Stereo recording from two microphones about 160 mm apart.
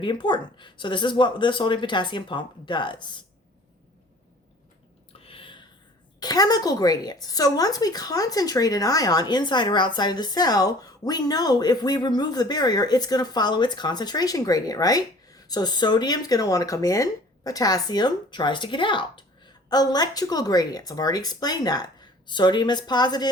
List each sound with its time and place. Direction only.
0.0 s a woman's voice: 30° left (ahead or behind)
5.2 s a sound: 35° left (ahead or behind)
6.1 s a woman's voice: 25° left (ahead or behind)